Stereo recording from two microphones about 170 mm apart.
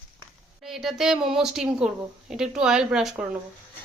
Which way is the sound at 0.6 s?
Centre (ahead or behind).